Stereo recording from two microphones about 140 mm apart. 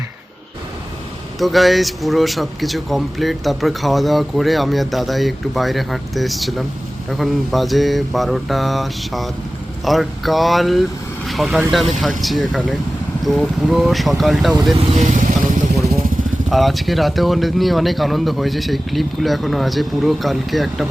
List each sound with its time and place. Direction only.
1.4 s speech: centre (ahead or behind)
14.8 s speech: 55° right (ahead or behind)
16.5 s speech: centre (ahead or behind)